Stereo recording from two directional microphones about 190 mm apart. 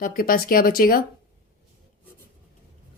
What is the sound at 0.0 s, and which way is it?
A woman's voice, 50° left (ahead or behind).